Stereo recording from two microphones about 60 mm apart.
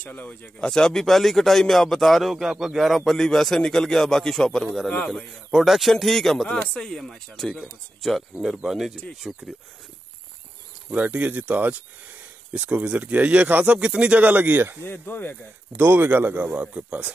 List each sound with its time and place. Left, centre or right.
0.0 s speech: left
0.6 s speech: centre
5.5 s speech: centre
10.9 s speech: right
14.3 s speech: right
14.8 s speech: left
15.8 s speech: right